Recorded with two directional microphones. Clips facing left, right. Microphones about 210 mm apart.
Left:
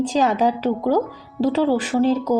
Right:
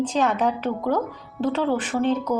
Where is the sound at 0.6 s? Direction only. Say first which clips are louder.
Left 4 dB; 30° left (ahead or behind).